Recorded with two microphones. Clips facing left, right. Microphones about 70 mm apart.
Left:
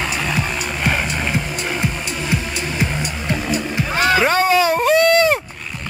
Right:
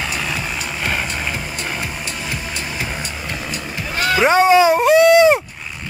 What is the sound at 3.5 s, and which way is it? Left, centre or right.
Music, centre.